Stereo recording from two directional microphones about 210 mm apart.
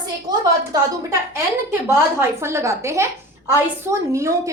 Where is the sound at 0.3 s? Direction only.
20° right (ahead or behind).